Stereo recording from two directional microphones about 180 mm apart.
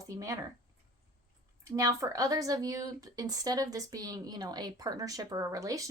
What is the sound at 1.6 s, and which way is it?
A woman's voice, 15° right (ahead or behind).